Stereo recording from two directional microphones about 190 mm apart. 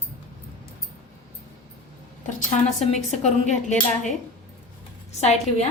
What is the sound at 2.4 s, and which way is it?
A woman's voice, 40° left (ahead or behind).